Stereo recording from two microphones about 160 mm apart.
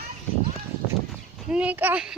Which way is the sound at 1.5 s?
10° right (ahead or behind).